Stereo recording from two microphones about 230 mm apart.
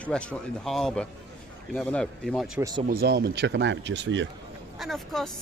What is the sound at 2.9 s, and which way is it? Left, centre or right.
Speech, right.